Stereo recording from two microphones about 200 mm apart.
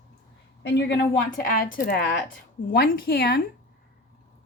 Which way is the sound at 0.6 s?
60° left (ahead or behind).